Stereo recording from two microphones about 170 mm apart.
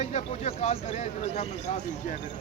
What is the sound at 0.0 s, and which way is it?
Speech, 40° left (ahead or behind).